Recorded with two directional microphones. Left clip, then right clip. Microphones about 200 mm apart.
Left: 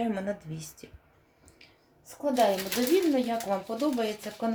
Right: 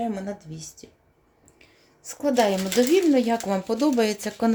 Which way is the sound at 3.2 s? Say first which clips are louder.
Right 5 dB; 65° right (ahead or behind).